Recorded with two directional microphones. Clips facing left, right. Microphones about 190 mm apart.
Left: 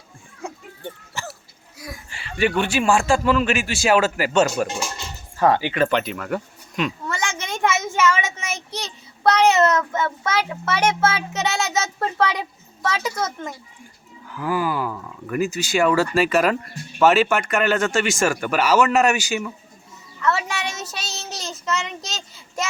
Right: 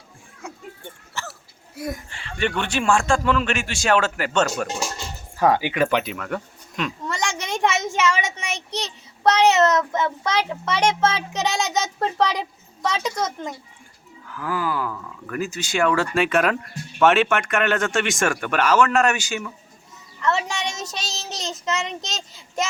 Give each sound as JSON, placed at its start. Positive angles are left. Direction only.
{"t": 0.4, "sound": "children playing", "side_deg": 30}
{"t": 1.2, "sound": "hiccup", "side_deg": 15}
{"t": 1.7, "sound": "speech", "side_deg": -55}
{"t": 2.0, "sound": "a sound", "side_deg": 10}
{"t": 2.6, "sound": "speech", "side_deg": 5}
{"t": 5.4, "sound": "speech", "side_deg": -10}
{"t": 6.1, "sound": "a child's voice", "side_deg": 5}